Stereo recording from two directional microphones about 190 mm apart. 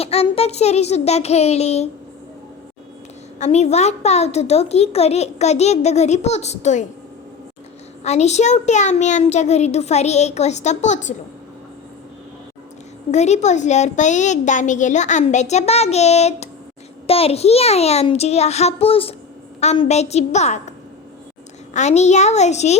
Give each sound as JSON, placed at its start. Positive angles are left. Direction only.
{"t": 0.0, "sound": "a woman's voice", "side_deg": 30}
{"t": 3.4, "sound": "a woman's voice", "side_deg": 35}
{"t": 8.0, "sound": "a woman's voice", "side_deg": 35}
{"t": 13.1, "sound": "a woman's voice", "side_deg": 35}